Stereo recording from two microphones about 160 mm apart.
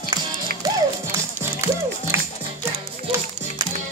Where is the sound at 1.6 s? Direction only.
20° right (ahead or behind).